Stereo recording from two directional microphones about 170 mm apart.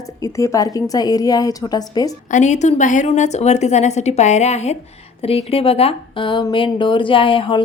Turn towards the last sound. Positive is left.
turn(degrees=30)  # may be behind; listen again after turning